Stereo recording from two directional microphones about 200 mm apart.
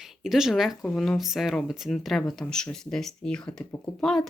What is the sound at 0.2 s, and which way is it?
Speech, centre (ahead or behind).